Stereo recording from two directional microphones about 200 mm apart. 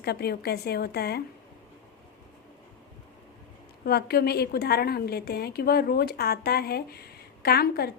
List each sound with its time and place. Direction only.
0.0 s a woman's voice: 50° left (ahead or behind)
3.8 s a woman's voice: 50° left (ahead or behind)